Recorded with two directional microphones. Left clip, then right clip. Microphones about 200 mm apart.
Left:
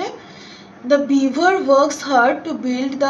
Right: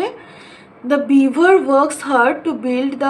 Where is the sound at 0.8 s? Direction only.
30° right (ahead or behind).